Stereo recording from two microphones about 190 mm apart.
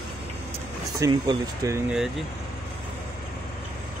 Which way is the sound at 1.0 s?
20° right (ahead or behind).